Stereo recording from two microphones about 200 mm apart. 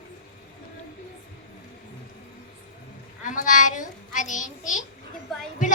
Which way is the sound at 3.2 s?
40° left (ahead or behind).